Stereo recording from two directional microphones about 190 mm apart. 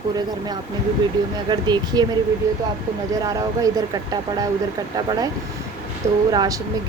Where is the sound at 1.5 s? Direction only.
20° right (ahead or behind).